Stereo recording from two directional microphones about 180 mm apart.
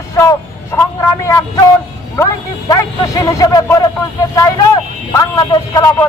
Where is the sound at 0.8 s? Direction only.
15° left (ahead or behind).